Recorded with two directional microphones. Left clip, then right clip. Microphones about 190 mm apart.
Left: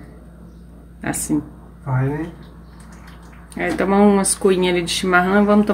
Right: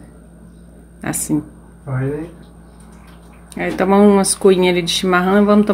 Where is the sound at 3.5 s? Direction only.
20° right (ahead or behind).